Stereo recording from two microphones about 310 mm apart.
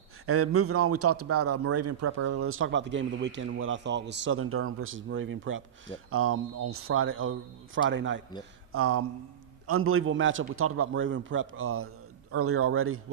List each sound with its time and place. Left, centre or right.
0.3 s a man's voice: right